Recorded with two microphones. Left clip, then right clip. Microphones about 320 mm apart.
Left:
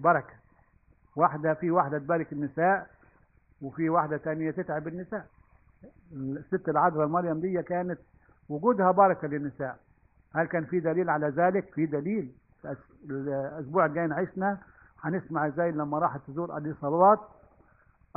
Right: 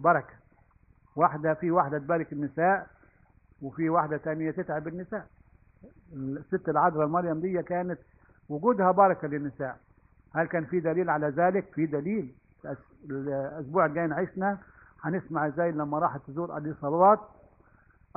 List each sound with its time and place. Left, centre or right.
0.0 s a man's voice: left
6.3 s a man's voice: left